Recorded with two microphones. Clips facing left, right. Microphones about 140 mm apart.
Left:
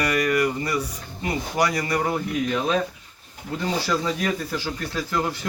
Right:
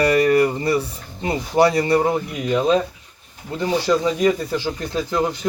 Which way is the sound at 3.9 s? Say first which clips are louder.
Right 9 dB; 20° right (ahead or behind).